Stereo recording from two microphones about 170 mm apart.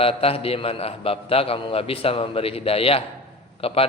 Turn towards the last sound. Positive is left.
turn(degrees=35)  # may be behind; listen again after turning